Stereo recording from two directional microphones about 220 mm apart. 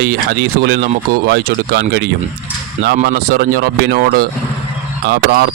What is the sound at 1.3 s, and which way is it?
Speech, 45° right (ahead or behind).